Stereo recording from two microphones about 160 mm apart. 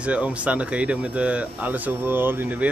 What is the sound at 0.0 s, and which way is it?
Speech, 10° right (ahead or behind).